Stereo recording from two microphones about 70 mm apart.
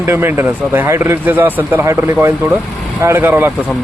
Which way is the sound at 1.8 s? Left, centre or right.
Right.